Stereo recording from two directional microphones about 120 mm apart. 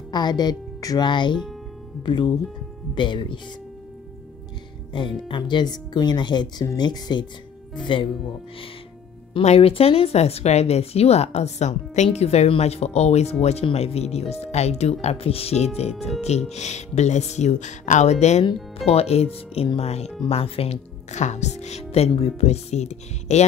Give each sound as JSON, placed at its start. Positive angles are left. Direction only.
{"t": 0.1, "sound": "speech", "side_deg": 35}
{"t": 4.9, "sound": "speech", "side_deg": 40}
{"t": 9.4, "sound": "speech", "side_deg": 55}
{"t": 15.9, "sound": "speech", "side_deg": 0}
{"t": 16.2, "sound": "speech", "side_deg": 65}
{"t": 18.9, "sound": "speech", "side_deg": 60}